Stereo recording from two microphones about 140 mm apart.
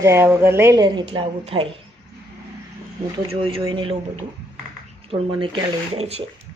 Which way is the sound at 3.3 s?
40° right (ahead or behind).